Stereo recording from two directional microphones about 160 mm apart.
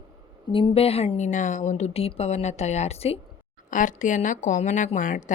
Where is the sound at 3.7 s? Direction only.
55° left (ahead or behind).